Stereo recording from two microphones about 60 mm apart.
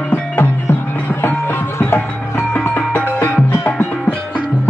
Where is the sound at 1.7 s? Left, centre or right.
Left.